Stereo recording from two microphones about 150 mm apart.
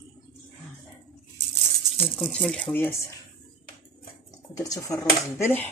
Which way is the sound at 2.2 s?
5° left (ahead or behind).